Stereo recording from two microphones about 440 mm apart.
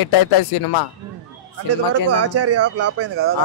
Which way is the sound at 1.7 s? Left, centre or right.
Right.